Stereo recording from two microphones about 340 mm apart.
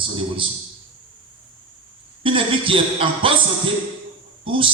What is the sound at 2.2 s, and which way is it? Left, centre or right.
A man's voice, centre.